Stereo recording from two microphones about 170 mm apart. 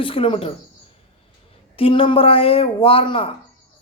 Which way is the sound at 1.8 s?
30° left (ahead or behind).